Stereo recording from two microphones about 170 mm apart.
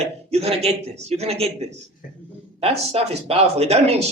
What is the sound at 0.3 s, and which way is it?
Speech, 35° right (ahead or behind).